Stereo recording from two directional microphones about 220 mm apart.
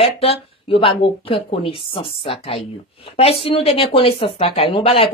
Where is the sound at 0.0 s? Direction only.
25° left (ahead or behind).